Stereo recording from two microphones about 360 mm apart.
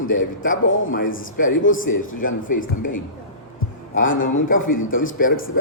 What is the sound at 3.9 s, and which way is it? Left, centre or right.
A man's voice, left.